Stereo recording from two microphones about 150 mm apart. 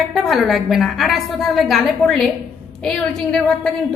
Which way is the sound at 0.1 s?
Centre (ahead or behind).